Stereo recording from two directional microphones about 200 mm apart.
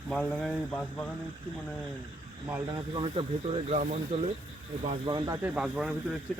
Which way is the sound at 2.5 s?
20° right (ahead or behind).